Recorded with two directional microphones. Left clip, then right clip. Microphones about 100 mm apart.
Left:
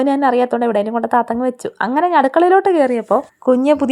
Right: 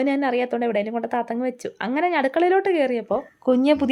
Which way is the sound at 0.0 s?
35° left (ahead or behind).